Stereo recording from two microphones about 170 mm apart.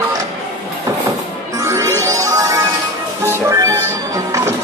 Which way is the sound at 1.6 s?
20° right (ahead or behind).